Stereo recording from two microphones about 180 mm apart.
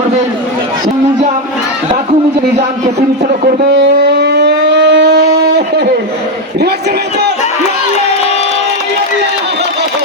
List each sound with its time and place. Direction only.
3.4 s music: 65° right (ahead or behind)